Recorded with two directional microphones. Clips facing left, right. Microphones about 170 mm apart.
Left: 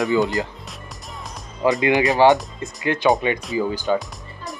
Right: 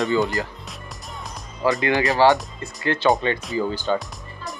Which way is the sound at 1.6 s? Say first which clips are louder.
Left 3 dB; 20° left (ahead or behind).